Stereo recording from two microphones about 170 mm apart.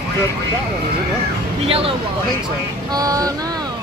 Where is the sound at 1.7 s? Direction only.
35° right (ahead or behind).